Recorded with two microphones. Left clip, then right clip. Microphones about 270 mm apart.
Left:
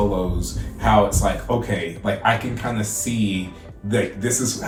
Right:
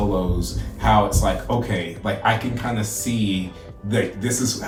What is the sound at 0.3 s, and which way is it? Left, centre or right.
Speech, centre.